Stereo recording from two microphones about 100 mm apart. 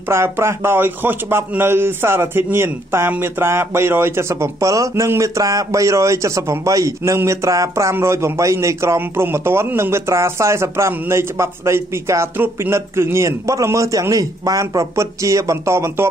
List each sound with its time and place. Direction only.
0.1 s a man's voice: 25° right (ahead or behind)